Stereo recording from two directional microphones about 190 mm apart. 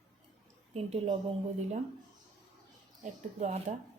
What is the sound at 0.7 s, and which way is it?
Speech, 30° right (ahead or behind).